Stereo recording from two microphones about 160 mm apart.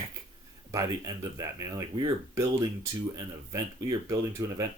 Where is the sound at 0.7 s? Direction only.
20° right (ahead or behind).